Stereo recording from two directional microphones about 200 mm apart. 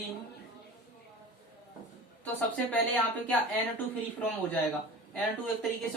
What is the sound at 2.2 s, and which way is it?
Speech, 10° left (ahead or behind).